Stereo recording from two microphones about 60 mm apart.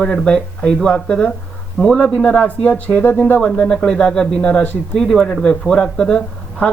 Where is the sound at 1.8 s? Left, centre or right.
Centre.